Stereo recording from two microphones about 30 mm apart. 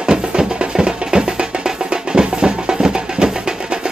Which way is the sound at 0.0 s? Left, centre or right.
Right.